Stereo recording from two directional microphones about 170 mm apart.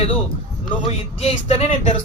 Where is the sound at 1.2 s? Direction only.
40° left (ahead or behind).